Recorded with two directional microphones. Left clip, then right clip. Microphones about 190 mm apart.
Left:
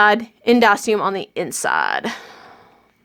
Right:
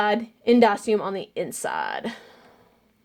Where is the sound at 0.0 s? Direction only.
30° left (ahead or behind).